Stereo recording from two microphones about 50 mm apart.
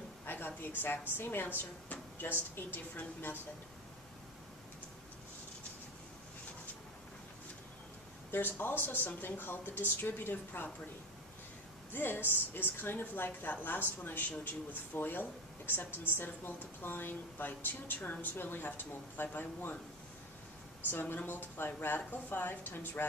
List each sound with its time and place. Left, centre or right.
0.2 s a sound: left
1.0 s a woman's voice: left
8.3 s a woman's voice: left
11.9 s a woman's voice: left
20.9 s speech: left